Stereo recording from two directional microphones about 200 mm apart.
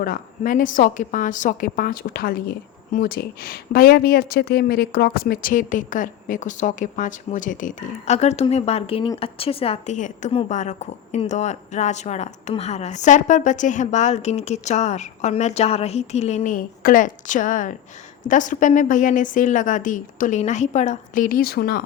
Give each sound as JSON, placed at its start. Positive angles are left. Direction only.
{"t": 0.0, "sound": "a woman's voice", "side_deg": 45}